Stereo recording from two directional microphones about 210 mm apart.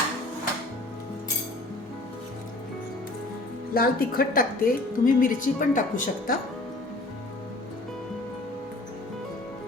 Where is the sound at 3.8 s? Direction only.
45° left (ahead or behind).